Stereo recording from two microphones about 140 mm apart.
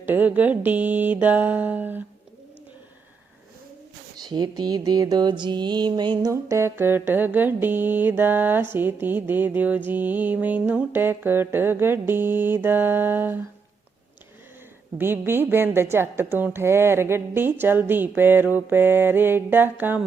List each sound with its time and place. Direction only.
0.0 s a woman's voice: 10° right (ahead or behind)
4.2 s mantra: 30° right (ahead or behind)
6.3 s a woman's voice: 20° right (ahead or behind)
14.9 s a woman's voice: 15° right (ahead or behind)